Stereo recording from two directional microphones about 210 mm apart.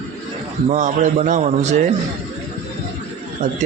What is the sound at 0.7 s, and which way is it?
Speech, 35° right (ahead or behind).